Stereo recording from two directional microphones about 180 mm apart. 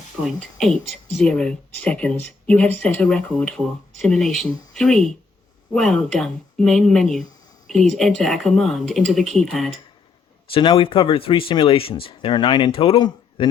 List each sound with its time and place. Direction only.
0.3 s speech: centre (ahead or behind)
10.5 s speech: 30° left (ahead or behind)